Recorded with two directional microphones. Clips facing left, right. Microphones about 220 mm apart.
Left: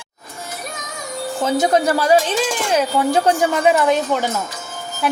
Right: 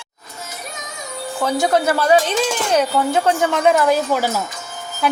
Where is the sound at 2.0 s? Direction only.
Centre (ahead or behind).